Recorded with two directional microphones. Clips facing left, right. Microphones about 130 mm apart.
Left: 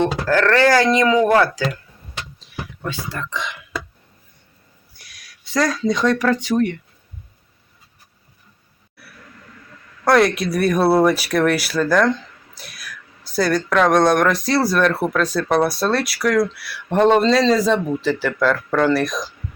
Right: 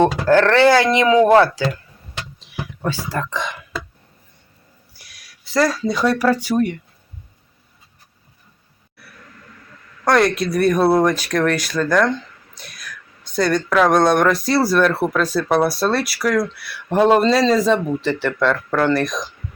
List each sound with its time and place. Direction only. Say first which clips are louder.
0.4 s speech: right 1 dB; 20° right (ahead or behind)
2.8 s speech: right 5 dB; 35° right (ahead or behind)
4.9 s speech: left 3 dB; 5° right (ahead or behind)
9.0 s a sound: even; 5° left (ahead or behind)
10.0 s speech: left 1 dB; centre (ahead or behind)